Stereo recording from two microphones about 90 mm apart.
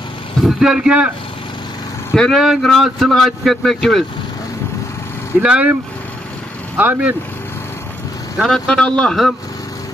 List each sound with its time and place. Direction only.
0.4 s speech: 5° right (ahead or behind)
2.1 s speech: 5° left (ahead or behind)
5.4 s speech: 15° right (ahead or behind)
6.8 s speech: 20° right (ahead or behind)
8.4 s speech: 5° left (ahead or behind)